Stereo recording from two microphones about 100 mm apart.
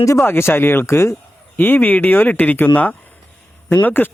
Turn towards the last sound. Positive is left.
turn(degrees=20)  # may be behind; listen again after turning